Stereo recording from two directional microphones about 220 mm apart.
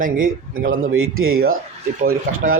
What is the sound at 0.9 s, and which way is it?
Speech, 65° right (ahead or behind).